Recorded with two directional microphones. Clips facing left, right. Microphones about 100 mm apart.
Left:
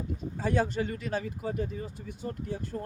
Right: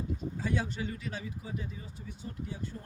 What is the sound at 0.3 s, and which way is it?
Speech, 45° left (ahead or behind).